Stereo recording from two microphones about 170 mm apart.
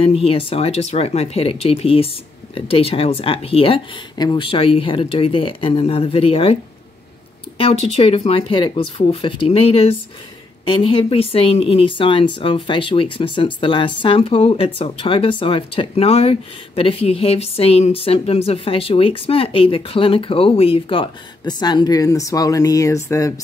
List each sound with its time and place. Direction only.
0.0 s speech: 35° left (ahead or behind)